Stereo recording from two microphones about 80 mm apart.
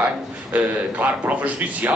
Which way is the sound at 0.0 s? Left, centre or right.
Centre.